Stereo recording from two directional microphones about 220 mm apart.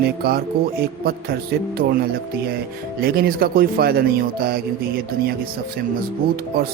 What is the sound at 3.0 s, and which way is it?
Speech, 45° right (ahead or behind).